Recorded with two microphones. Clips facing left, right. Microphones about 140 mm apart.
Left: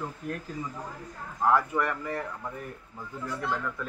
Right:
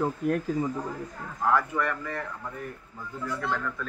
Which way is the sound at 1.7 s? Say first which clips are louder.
Even; 15° left (ahead or behind).